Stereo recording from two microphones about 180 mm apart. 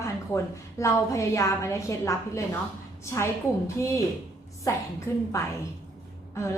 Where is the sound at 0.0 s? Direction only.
15° left (ahead or behind).